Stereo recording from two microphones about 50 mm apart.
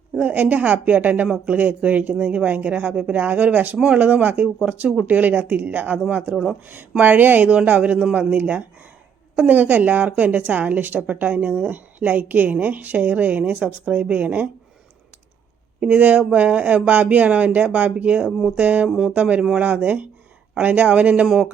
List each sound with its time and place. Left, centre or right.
0.2 s a woman's voice: right
6.3 s speech: centre
7.0 s a woman's voice: right
15.8 s speech: right
18.9 s speech: centre
19.1 s a woman's voice: right